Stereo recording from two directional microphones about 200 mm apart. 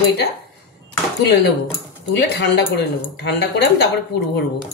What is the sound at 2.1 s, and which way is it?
Speech, 55° left (ahead or behind).